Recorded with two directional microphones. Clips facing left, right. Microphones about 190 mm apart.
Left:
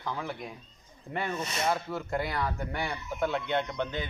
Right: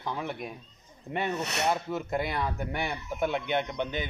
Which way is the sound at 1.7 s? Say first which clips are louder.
Right 1 dB; 20° right (ahead or behind).